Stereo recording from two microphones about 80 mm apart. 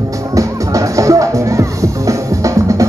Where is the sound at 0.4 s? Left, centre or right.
Right.